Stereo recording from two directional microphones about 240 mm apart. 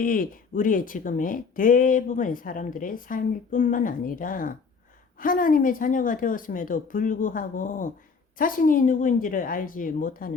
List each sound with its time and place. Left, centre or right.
0.0 s speech: left